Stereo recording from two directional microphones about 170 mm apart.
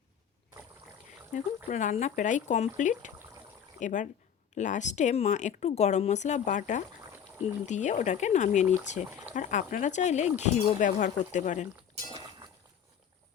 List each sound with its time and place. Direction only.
1.3 s speech: 45° left (ahead or behind)